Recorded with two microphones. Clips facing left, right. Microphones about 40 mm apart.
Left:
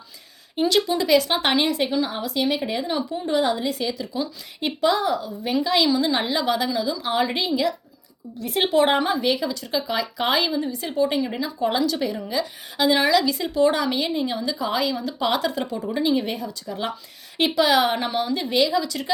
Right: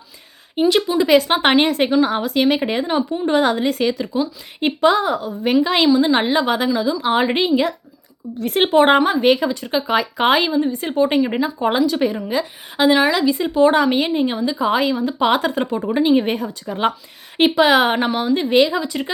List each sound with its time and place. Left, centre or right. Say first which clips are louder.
0.6 s speech: right 5 dB; right
2.8 s speech: right 6 dB; right
3.2 s speech: right 4 dB; right
5.9 s speech: right 6 dB; right